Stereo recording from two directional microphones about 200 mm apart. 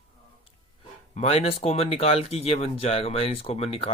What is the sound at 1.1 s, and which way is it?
Speech, 30° left (ahead or behind).